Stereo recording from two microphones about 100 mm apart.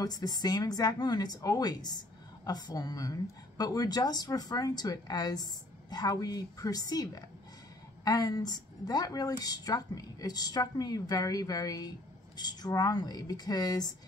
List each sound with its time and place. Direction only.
0.0 s a woman's voice: 40° left (ahead or behind)